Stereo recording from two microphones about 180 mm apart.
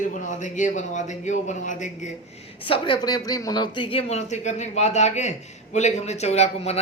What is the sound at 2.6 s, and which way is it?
Speech, 30° left (ahead or behind).